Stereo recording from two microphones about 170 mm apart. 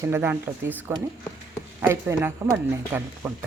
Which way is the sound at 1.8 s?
15° right (ahead or behind).